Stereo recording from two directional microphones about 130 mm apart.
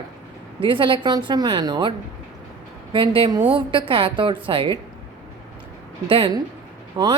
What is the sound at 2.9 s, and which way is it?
A woman's voice, 40° right (ahead or behind).